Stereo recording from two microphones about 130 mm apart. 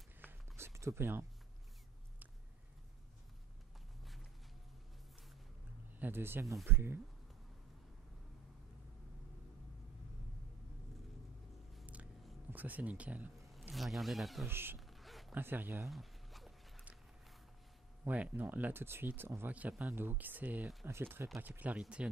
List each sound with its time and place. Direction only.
0.2 s a sound: 15° right (ahead or behind)
5.9 s speech: 15° right (ahead or behind)
11.8 s biting: 10° right (ahead or behind)
12.4 s speech: 15° right (ahead or behind)
13.5 s speech: centre (ahead or behind)
14.5 s speech: 15° right (ahead or behind)
14.8 s a sound: centre (ahead or behind)
15.3 s speech: 15° right (ahead or behind)
15.9 s dog: centre (ahead or behind)
18.0 s speech: 10° right (ahead or behind)